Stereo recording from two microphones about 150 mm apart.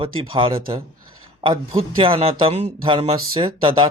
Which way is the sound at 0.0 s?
35° right (ahead or behind).